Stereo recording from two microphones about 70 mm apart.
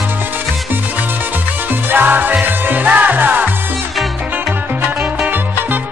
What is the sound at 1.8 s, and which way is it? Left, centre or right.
Music, right.